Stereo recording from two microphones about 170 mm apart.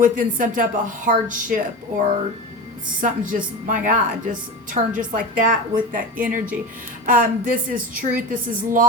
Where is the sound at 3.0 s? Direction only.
50° right (ahead or behind).